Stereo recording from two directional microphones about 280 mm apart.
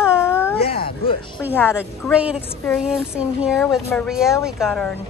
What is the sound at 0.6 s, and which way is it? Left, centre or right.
Speech, centre.